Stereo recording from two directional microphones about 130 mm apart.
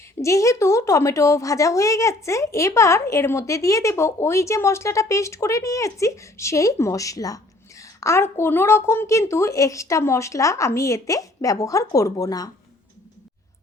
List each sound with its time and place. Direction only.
0.2 s a woman's voice: 25° left (ahead or behind)